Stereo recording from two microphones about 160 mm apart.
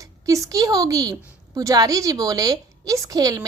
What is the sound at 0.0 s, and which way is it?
A woman's voice, 20° right (ahead or behind).